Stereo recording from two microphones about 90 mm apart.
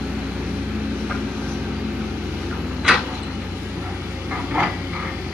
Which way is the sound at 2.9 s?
10° right (ahead or behind).